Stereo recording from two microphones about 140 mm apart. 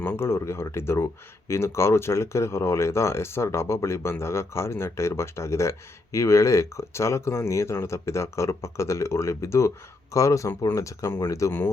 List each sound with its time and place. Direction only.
0.0 s speech: 15° left (ahead or behind)